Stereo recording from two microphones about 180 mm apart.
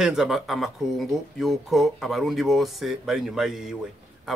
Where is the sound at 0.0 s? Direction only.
5° right (ahead or behind).